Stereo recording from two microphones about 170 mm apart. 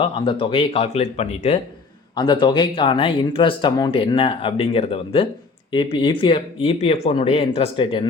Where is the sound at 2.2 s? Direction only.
25° left (ahead or behind).